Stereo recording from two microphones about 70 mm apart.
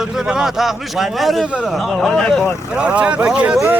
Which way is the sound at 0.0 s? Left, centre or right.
Centre.